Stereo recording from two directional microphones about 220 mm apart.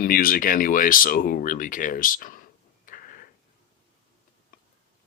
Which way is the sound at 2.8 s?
40° left (ahead or behind).